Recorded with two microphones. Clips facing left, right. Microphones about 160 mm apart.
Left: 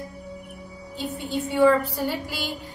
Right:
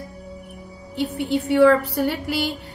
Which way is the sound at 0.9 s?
70° right (ahead or behind).